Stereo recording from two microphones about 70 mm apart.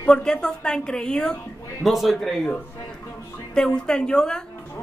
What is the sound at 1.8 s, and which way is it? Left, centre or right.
Speech, centre.